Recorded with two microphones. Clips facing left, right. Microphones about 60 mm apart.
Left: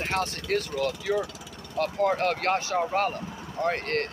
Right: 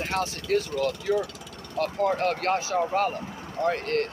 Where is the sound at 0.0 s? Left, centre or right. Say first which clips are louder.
Even; left.